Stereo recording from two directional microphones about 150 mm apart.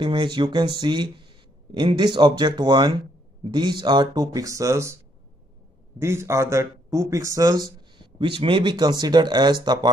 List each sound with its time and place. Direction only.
0.0 s speech: 30° right (ahead or behind)